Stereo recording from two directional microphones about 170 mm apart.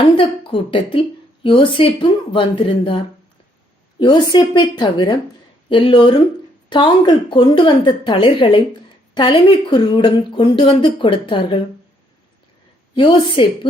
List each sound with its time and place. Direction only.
0.0 s a woman's voice: 30° left (ahead or behind)
4.0 s a woman's voice: 25° left (ahead or behind)
12.9 s speech: 30° left (ahead or behind)